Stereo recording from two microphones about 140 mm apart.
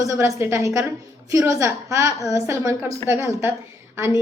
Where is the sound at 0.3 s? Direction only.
20° right (ahead or behind).